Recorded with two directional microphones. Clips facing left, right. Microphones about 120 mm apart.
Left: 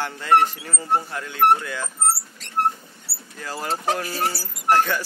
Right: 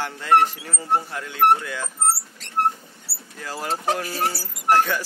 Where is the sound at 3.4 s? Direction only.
5° right (ahead or behind).